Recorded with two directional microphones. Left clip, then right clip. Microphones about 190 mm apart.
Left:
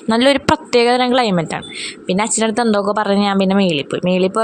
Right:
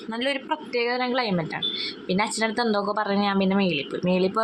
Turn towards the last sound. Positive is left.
turn(degrees=35)  # may be behind; listen again after turning